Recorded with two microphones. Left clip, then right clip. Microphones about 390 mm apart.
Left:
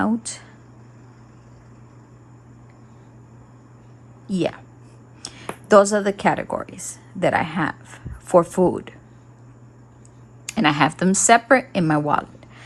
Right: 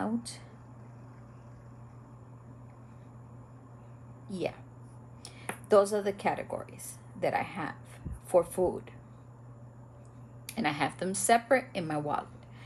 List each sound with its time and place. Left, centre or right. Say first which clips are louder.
4.3 s speech: left 11 dB; left
10.4 s a woman's voice: left 13 dB; centre